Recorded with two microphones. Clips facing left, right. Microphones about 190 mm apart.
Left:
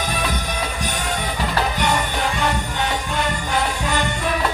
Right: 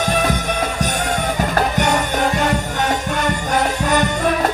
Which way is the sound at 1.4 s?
45° right (ahead or behind).